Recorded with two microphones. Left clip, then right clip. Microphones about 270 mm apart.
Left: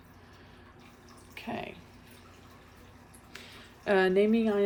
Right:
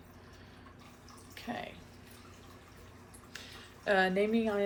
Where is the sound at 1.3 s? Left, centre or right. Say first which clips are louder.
Left 3 dB; left.